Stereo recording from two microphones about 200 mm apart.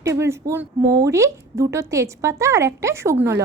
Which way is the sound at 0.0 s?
15° right (ahead or behind).